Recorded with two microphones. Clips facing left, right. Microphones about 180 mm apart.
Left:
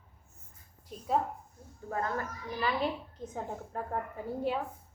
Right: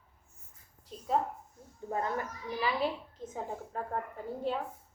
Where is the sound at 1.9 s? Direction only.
20° right (ahead or behind).